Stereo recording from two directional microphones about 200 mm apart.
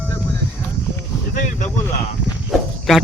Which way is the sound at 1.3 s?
40° left (ahead or behind).